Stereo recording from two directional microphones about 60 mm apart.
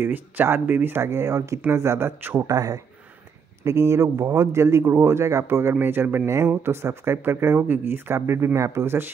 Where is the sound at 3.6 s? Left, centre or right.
Right.